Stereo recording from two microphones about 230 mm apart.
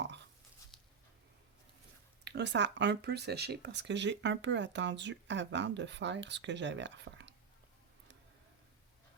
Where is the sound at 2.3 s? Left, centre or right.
Right.